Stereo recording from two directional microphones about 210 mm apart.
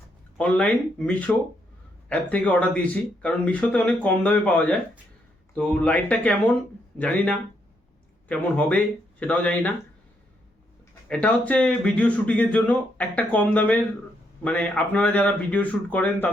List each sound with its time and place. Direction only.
0.3 s speech: 5° left (ahead or behind)
8.3 s speech: 5° left (ahead or behind)
11.1 s speech: 5° left (ahead or behind)